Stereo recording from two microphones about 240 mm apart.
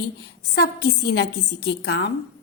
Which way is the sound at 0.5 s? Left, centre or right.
Left.